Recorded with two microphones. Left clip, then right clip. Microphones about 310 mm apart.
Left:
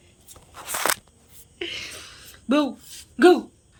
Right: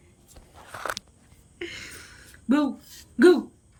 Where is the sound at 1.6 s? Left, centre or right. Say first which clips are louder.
Left 5 dB; centre.